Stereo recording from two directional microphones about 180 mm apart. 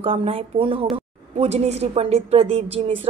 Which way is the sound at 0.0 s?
30° right (ahead or behind).